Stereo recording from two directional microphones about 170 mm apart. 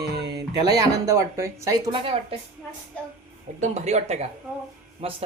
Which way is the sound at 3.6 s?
40° right (ahead or behind).